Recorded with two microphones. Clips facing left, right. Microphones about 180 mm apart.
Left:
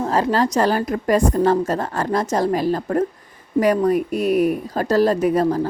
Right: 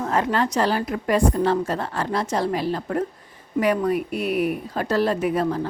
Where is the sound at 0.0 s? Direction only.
35° left (ahead or behind).